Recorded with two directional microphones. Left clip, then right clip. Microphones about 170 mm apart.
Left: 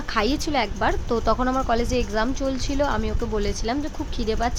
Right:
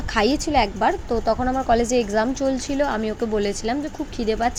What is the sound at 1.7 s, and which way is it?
A woman's voice, 10° right (ahead or behind).